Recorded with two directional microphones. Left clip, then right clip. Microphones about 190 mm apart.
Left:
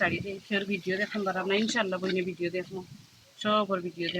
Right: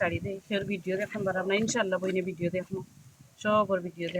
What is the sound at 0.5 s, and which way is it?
Speech, 35° right (ahead or behind).